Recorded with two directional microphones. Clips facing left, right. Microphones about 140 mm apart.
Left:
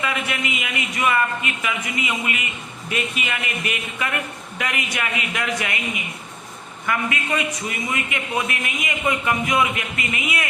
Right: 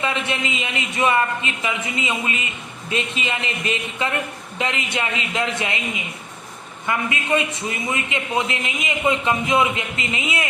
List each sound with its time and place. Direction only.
0.0 s a man's voice: 25° right (ahead or behind)